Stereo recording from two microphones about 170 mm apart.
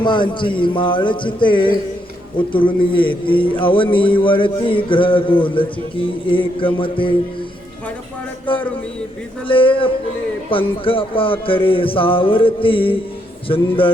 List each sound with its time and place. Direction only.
0.0 s a man's voice: 25° left (ahead or behind)
9.5 s a man's voice: 30° left (ahead or behind)